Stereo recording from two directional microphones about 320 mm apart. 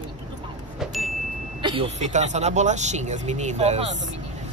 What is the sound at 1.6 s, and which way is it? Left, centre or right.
Speech, centre.